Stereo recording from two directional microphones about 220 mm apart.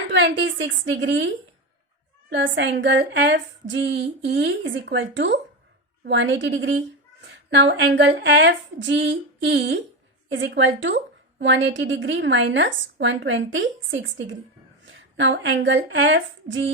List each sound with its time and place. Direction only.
0.1 s a woman's voice: 55° right (ahead or behind)